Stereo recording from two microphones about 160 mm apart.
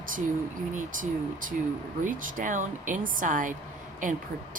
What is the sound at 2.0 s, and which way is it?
Speech, 55° right (ahead or behind).